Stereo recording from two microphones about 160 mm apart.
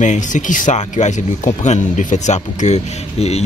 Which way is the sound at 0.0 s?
50° left (ahead or behind).